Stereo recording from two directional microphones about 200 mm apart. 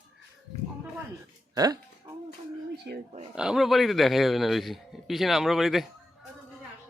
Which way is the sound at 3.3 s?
5° right (ahead or behind).